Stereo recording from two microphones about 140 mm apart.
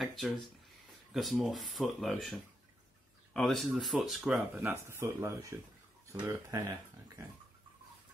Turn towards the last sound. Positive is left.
turn(degrees=-20)  # may be behind; listen again after turning